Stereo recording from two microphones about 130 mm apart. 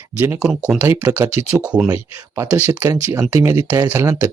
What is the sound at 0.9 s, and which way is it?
Speech, 25° right (ahead or behind).